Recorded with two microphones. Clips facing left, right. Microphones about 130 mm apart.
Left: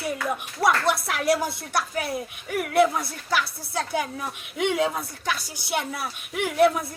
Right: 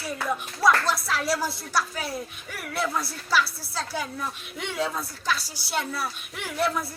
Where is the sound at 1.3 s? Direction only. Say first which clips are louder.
Left 1 dB; 20° left (ahead or behind).